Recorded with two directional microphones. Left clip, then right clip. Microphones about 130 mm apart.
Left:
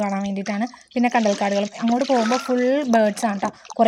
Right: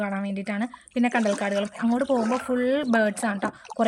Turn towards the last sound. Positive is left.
turn(degrees=20)  # may be behind; listen again after turning